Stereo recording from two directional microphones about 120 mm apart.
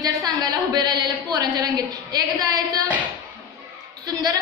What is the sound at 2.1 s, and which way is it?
Speech, 30° right (ahead or behind).